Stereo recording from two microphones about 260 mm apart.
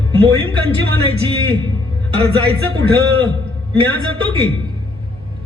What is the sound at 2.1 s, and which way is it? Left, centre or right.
Speech, right.